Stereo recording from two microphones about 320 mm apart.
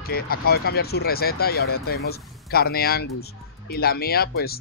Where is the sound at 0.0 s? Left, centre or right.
Left.